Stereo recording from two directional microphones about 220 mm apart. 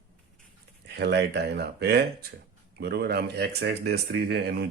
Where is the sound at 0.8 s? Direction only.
50° right (ahead or behind).